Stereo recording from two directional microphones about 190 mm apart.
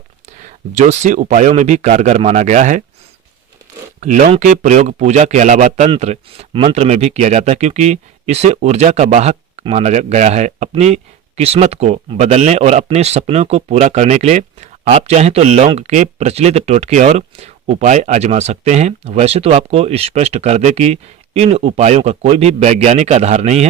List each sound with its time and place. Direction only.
0.3 s speech: 40° right (ahead or behind)
4.0 s speech: 40° right (ahead or behind)